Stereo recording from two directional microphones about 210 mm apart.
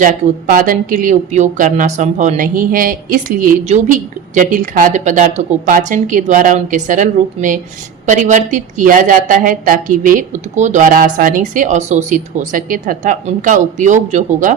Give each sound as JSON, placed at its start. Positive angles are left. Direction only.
{"t": 0.0, "sound": "speech", "side_deg": -40}